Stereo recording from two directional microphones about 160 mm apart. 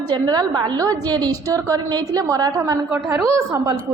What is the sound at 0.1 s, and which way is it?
A woman's voice, 25° right (ahead or behind).